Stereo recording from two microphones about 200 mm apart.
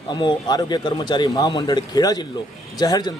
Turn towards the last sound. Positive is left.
turn(degrees=20)  # may be behind; listen again after turning